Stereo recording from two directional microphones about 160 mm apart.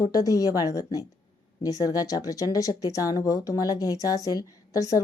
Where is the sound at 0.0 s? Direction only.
20° left (ahead or behind).